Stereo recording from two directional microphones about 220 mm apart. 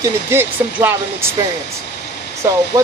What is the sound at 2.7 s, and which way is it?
Speech, 15° right (ahead or behind).